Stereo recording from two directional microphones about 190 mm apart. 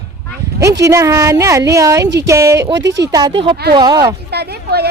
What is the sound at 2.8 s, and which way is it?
Speech, 70° right (ahead or behind).